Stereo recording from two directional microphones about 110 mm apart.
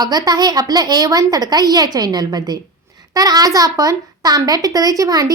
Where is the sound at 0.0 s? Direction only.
40° right (ahead or behind).